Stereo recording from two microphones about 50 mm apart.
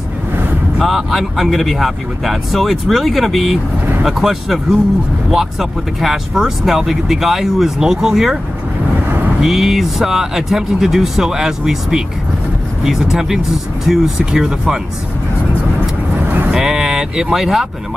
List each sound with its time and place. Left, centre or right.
0.8 s speech: centre
9.4 s speech: centre
16.3 s vehicle: right
16.5 s speech: centre